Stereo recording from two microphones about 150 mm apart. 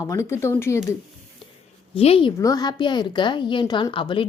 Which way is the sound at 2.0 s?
40° left (ahead or behind).